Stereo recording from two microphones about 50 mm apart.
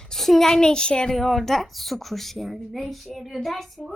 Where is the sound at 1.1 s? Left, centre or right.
Centre.